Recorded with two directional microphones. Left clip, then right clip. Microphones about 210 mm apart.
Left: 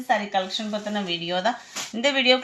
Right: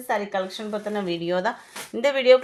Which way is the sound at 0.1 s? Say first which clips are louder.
Left 2 dB; 55° right (ahead or behind).